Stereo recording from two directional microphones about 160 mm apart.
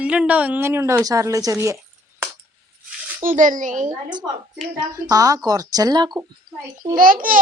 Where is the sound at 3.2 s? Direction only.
55° right (ahead or behind).